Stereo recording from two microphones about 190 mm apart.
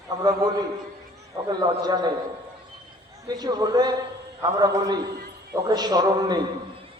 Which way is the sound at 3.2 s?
20° right (ahead or behind).